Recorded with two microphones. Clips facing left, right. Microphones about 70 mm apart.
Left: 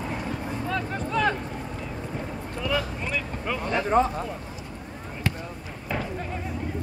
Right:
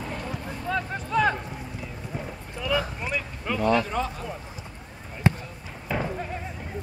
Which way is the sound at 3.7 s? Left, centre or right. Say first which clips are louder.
Left 4 dB; left.